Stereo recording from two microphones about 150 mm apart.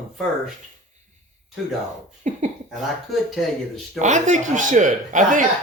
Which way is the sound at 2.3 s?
50° right (ahead or behind).